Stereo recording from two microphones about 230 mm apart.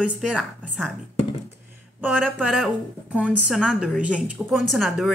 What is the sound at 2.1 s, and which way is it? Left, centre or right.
Speech, centre.